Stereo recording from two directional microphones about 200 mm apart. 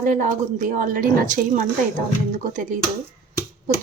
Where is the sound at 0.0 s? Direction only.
40° right (ahead or behind).